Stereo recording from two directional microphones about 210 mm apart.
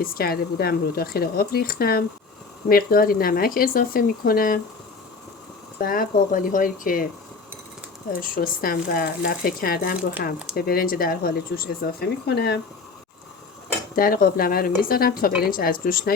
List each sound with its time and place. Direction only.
0.0 s speech: 45° left (ahead or behind)
5.8 s speech: 40° left (ahead or behind)
8.2 s speech: 45° left (ahead or behind)
13.9 s speech: 45° left (ahead or behind)